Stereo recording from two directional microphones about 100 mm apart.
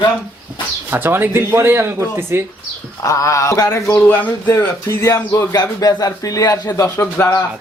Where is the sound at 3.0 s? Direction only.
30° left (ahead or behind); by 4.3 s 15° left (ahead or behind).